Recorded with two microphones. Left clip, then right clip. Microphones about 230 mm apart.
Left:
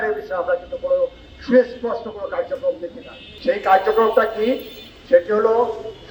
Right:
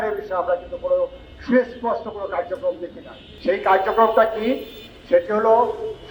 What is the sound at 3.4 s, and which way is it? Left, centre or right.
A man's voice, left.